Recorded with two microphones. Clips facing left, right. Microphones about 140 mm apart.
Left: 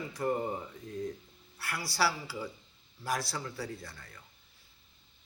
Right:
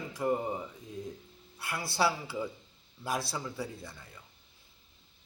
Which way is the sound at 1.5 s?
20° right (ahead or behind).